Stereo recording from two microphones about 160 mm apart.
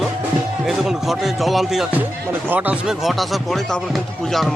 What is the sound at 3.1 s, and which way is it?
Music, centre (ahead or behind).